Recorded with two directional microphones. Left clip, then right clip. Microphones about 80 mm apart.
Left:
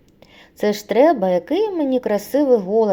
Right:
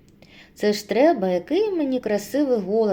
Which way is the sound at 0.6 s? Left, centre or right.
Left.